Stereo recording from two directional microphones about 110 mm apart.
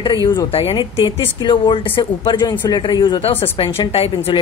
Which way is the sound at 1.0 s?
45° left (ahead or behind).